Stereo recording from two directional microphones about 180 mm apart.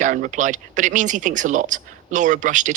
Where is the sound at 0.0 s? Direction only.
45° right (ahead or behind).